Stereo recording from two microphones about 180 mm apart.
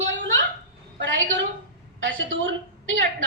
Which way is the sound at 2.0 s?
90° right.